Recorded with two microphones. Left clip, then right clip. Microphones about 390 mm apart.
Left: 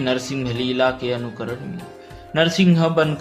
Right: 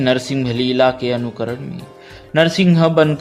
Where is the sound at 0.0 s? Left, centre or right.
Centre.